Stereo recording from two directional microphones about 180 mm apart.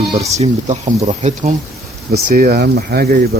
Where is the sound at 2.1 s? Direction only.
55° right (ahead or behind).